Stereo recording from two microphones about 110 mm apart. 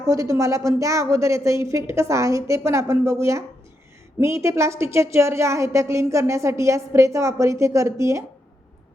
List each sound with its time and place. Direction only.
0.1 s a woman's voice: 30° right (ahead or behind)